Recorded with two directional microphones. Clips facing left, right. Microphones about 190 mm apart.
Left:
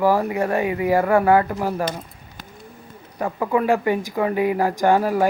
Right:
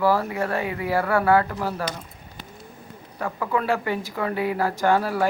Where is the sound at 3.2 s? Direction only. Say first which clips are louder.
Left 5 dB; 20° left (ahead or behind).